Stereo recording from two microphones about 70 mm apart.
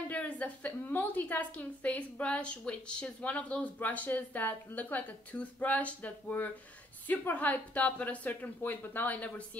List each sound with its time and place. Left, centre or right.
0.1 s a woman's voice: left